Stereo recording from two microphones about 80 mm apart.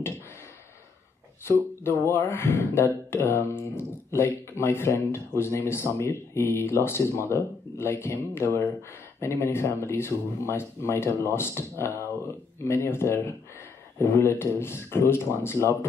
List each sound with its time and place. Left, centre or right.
1.4 s speech: left
12.6 s speech: left